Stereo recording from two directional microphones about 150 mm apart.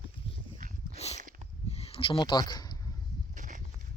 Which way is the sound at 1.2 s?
60° right (ahead or behind).